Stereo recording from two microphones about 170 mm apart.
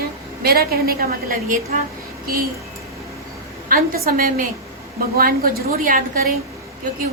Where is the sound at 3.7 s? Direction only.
55° right (ahead or behind).